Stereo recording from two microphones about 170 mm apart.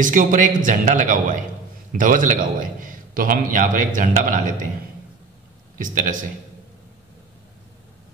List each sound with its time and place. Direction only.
0.0 s a man's voice: 50° right (ahead or behind)
5.8 s a man's voice: 50° right (ahead or behind)